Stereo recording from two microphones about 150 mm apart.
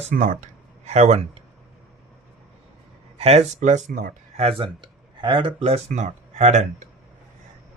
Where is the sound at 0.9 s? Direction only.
50° right (ahead or behind).